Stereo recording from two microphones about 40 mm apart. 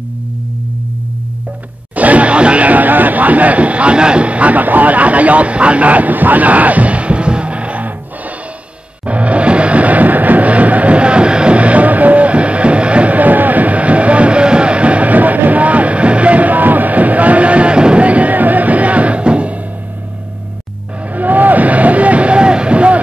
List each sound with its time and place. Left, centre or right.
2.0 s music: right
9.0 s music: right
18.0 s music: right
21.1 s vehicle: right